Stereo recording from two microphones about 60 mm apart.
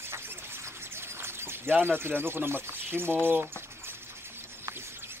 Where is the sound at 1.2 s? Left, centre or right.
Right.